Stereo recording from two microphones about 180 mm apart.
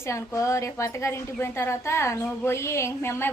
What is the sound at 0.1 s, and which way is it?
A woman's voice, 15° left (ahead or behind).